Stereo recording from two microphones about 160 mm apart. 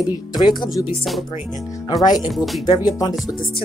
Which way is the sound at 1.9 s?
25° left (ahead or behind).